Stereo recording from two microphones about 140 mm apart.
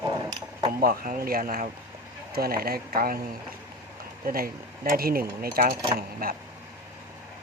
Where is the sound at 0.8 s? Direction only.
90° right.